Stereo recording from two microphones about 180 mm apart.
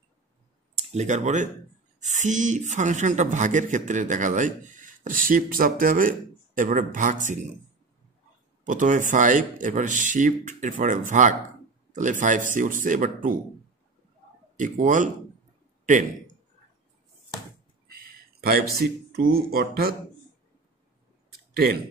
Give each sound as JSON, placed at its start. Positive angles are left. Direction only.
{"t": 0.7, "sound": "a woman's voice", "side_deg": -40}
{"t": 8.6, "sound": "a woman's voice", "side_deg": -45}
{"t": 14.6, "sound": "a woman's voice", "side_deg": -45}
{"t": 17.8, "sound": "speech", "side_deg": -55}